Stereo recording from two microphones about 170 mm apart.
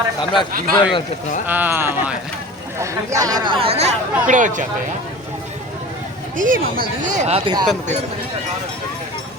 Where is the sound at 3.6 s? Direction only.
40° right (ahead or behind).